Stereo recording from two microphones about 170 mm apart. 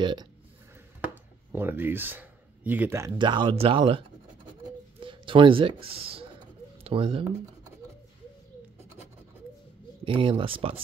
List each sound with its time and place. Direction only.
0.0 s speech: 25° right (ahead or behind)
1.5 s speech: 10° right (ahead or behind)
3.1 s speech: 25° right (ahead or behind)
5.0 s speech: 30° right (ahead or behind)
10.0 s speech: 30° right (ahead or behind)